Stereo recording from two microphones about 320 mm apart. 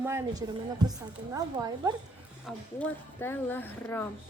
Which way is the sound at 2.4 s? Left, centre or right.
Centre.